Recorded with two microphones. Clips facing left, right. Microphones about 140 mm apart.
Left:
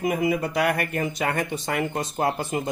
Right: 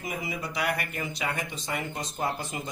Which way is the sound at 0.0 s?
55° left (ahead or behind).